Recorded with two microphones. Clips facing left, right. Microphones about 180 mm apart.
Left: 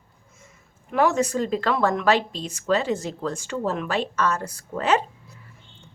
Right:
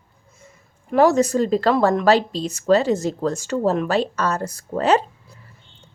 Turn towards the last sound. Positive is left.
turn(degrees=-35)  # may be behind; listen again after turning